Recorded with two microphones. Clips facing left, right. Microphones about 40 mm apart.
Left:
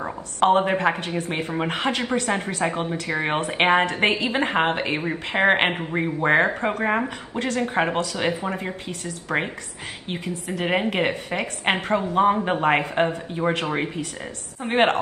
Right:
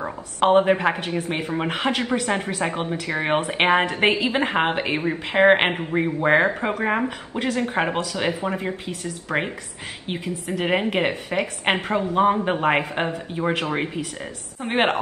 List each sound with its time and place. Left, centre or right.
0.0 s a woman's voice: centre